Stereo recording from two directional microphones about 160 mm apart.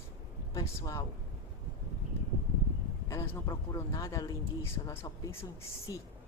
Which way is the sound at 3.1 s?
20° left (ahead or behind).